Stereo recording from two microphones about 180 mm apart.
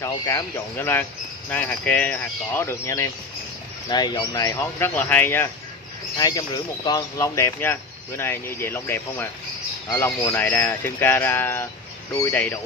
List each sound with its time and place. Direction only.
0.0 s speech: 20° left (ahead or behind)
6.1 s speech: 20° left (ahead or behind)